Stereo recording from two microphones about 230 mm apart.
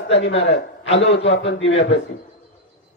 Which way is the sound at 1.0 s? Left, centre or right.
Left.